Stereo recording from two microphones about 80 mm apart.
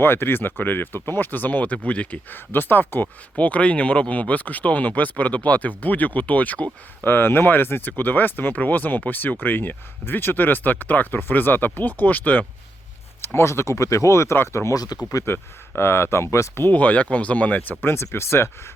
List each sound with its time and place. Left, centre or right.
0.0 s speech: left
13.2 s speech: left
16.6 s speech: centre